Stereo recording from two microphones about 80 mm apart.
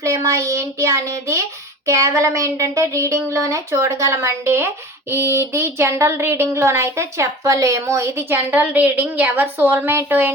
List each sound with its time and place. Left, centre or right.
0.0 s speech: right
8.7 s a woman's voice: right